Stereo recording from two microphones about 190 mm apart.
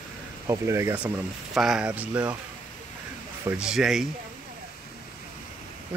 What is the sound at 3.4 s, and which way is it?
Speech, 5° right (ahead or behind).